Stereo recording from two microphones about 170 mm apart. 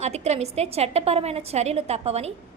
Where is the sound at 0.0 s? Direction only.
40° right (ahead or behind).